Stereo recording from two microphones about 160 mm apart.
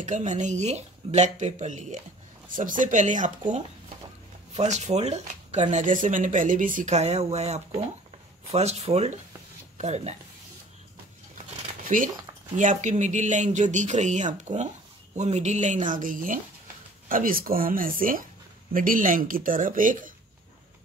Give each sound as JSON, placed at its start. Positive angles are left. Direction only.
{"t": 0.0, "sound": "speech", "side_deg": -50}
{"t": 11.8, "sound": "a sound", "side_deg": -55}
{"t": 12.5, "sound": "speech", "side_deg": -50}